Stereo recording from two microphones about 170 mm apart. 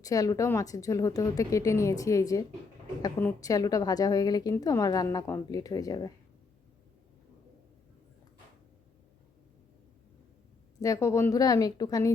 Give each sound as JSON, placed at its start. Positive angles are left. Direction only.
{"t": 0.0, "sound": "a woman's voice", "side_deg": 20}
{"t": 10.8, "sound": "a woman's voice", "side_deg": 20}